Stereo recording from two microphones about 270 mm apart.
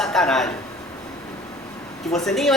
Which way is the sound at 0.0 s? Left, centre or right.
Centre.